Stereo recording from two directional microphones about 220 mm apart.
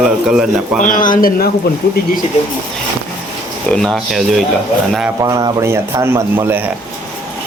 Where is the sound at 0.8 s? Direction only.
35° left (ahead or behind).